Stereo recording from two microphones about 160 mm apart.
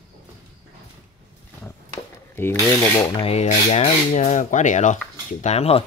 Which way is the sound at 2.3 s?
15° left (ahead or behind).